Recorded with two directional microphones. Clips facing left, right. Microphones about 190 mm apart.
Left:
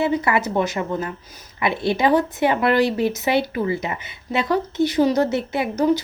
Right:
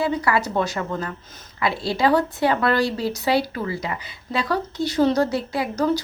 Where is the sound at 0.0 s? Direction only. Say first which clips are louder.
Left 2 dB; 20° left (ahead or behind).